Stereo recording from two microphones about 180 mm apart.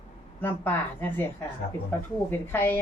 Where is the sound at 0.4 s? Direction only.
10° left (ahead or behind).